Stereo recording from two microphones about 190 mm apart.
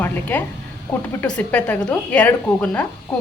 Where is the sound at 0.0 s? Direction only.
10° left (ahead or behind).